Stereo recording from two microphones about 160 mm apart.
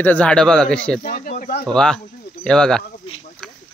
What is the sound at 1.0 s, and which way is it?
Speech, 65° left (ahead or behind).